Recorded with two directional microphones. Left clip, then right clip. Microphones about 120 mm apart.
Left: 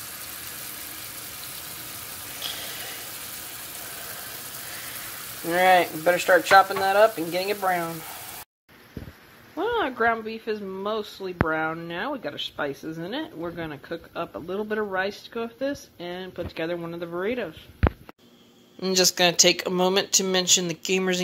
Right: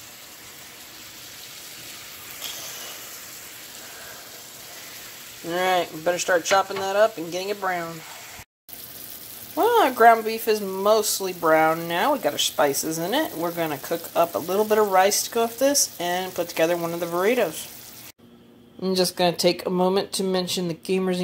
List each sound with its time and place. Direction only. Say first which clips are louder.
5.5 s speech: left 4 dB; 25° right (ahead or behind)
9.6 s speech: right 7 dB; 10° right (ahead or behind)
18.8 s speech: left 1 dB; 5° right (ahead or behind)